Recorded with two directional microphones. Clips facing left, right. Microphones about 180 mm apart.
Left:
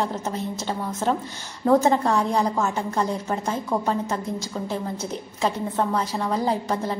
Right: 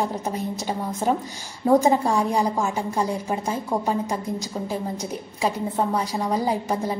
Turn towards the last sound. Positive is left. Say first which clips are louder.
# even
turn(degrees=-10)  # may be behind; listen again after turning